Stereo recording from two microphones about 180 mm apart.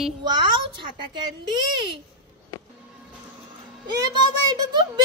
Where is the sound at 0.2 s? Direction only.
25° right (ahead or behind).